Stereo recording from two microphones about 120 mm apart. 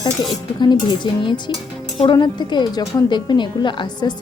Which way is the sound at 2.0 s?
40° left (ahead or behind).